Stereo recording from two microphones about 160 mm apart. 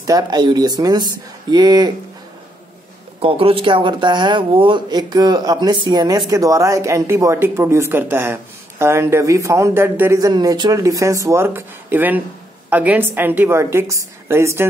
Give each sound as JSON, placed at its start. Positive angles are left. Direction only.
{"t": 0.0, "sound": "speech", "side_deg": -25}
{"t": 3.2, "sound": "a woman's voice", "side_deg": -35}